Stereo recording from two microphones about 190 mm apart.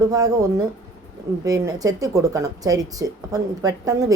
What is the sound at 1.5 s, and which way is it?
Speech, 20° right (ahead or behind).